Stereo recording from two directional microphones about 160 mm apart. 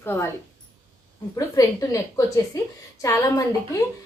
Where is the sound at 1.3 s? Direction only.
20° left (ahead or behind).